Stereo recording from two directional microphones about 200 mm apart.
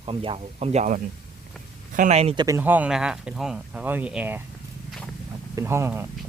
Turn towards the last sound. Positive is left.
turn(degrees=-10)  # may be behind; listen again after turning